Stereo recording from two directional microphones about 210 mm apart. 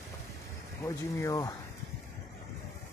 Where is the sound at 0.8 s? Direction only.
15° left (ahead or behind).